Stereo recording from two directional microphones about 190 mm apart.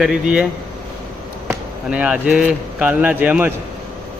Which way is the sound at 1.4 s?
5° right (ahead or behind).